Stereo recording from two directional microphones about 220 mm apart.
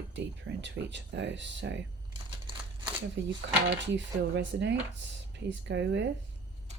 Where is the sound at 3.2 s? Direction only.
50° right (ahead or behind).